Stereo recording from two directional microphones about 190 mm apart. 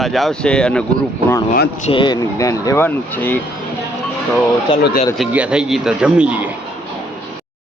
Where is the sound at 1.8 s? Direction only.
25° left (ahead or behind); by 3.4 s 10° left (ahead or behind).